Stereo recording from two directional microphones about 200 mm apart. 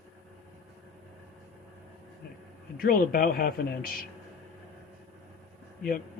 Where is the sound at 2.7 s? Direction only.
45° left (ahead or behind).